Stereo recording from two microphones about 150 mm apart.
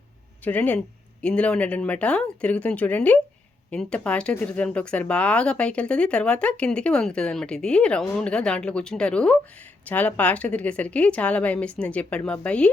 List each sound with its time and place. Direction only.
0.4 s speech: 10° left (ahead or behind)